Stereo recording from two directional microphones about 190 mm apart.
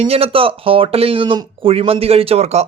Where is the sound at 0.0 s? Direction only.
30° right (ahead or behind).